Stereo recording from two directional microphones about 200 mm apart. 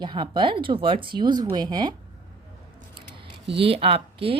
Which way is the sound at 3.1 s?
25° right (ahead or behind).